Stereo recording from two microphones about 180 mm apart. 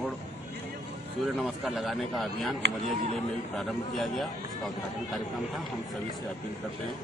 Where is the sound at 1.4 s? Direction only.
Centre (ahead or behind).